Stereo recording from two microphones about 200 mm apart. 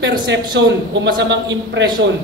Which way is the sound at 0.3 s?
60° right (ahead or behind).